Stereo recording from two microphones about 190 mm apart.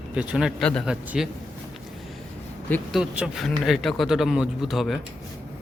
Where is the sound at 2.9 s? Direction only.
5° right (ahead or behind).